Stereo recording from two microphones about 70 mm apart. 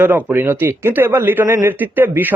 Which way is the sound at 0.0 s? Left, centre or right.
Right.